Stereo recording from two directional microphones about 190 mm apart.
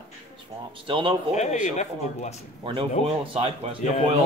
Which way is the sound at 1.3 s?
35° left (ahead or behind).